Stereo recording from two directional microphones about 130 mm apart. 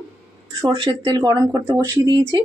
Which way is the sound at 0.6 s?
40° right (ahead or behind).